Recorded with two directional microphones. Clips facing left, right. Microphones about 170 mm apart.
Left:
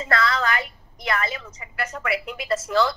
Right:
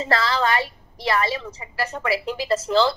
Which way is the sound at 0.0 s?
30° right (ahead or behind).